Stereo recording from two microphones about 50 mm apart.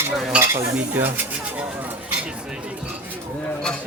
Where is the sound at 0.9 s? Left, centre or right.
Right.